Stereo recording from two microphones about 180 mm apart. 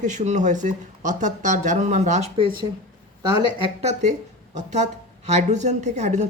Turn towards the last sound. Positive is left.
turn(degrees=-40)  # may be behind; listen again after turning